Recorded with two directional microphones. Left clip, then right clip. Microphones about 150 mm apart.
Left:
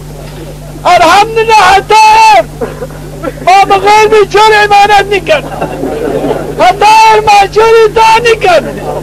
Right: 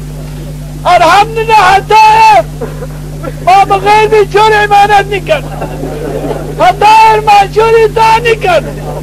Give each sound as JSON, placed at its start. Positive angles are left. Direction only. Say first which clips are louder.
{"t": 0.8, "sound": "a man's voice", "louder": "left 1 dB", "side_deg": 30}